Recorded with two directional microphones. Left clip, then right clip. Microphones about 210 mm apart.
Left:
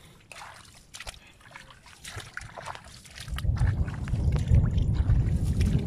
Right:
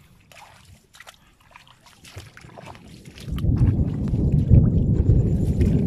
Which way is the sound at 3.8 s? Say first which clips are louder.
Right 10 dB; 20° right (ahead or behind).